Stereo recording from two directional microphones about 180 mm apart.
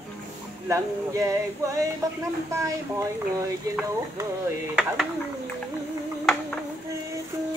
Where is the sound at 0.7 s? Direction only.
15° right (ahead or behind).